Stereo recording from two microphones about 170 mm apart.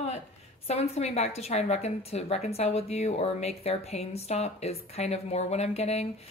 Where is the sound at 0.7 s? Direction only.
40° left (ahead or behind).